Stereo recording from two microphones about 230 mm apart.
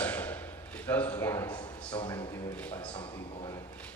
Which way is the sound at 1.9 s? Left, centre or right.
Left.